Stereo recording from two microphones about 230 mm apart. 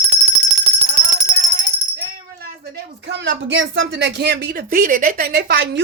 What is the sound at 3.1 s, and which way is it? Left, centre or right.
Speech, right.